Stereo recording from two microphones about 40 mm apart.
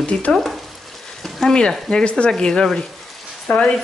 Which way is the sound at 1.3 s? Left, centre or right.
Centre.